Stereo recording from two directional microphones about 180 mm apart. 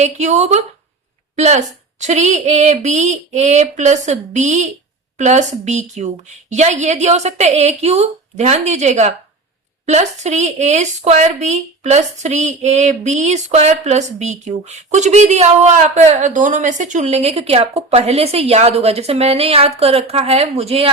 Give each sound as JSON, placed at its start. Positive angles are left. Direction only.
{"t": 0.0, "sound": "speech", "side_deg": -40}